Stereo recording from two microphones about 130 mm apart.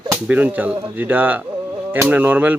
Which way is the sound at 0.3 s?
15° right (ahead or behind).